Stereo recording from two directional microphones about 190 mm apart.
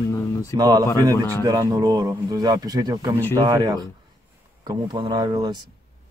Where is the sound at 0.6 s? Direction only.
20° right (ahead or behind).